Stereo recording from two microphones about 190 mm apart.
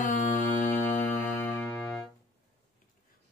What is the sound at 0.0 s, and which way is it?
Music, 40° left (ahead or behind).